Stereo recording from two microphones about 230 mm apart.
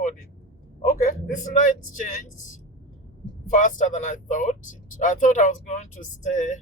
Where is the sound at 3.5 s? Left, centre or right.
Left.